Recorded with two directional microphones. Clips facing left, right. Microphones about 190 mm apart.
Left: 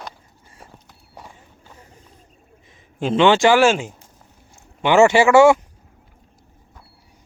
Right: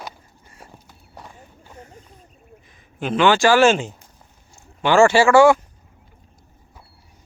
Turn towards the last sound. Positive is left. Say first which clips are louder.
# left 1 dB
turn(degrees=20)  # may be behind; listen again after turning